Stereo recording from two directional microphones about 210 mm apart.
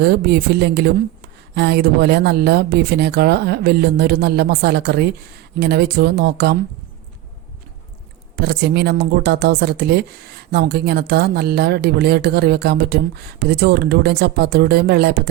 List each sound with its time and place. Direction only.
0.0 s speech: 50° right (ahead or behind)
8.4 s speech: 50° right (ahead or behind)